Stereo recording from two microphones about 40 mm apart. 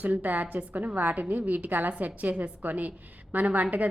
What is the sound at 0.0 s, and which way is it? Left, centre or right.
A woman's voice, right.